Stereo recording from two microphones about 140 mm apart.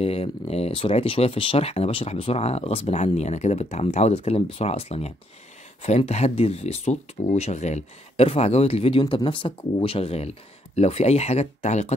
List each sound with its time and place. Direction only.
0.0 s speech: 45° left (ahead or behind)